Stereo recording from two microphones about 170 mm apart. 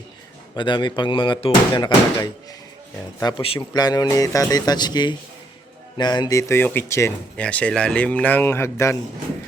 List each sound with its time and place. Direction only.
0.5 s speech: 25° left (ahead or behind)